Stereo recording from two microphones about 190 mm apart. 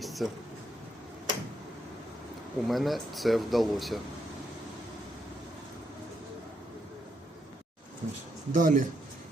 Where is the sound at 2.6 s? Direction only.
Centre (ahead or behind).